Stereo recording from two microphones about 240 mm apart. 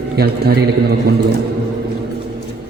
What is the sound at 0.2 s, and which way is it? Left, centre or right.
A man's voice, right.